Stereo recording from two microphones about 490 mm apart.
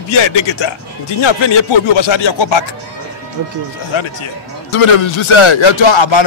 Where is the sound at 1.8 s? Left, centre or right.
Left.